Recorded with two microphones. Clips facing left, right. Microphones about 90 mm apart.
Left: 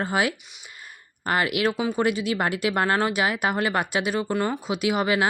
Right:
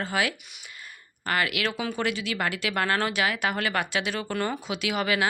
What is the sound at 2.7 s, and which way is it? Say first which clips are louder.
Speech: left 2 dB; 25° left (ahead or behind).